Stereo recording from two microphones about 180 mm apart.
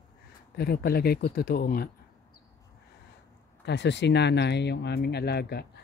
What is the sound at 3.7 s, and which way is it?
Speech, 75° left (ahead or behind).